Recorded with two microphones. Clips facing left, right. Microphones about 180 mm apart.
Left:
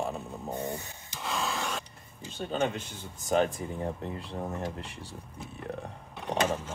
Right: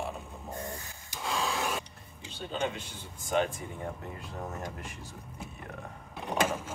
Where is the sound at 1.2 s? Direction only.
Centre (ahead or behind).